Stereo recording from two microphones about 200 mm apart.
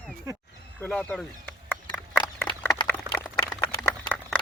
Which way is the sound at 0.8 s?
5° left (ahead or behind).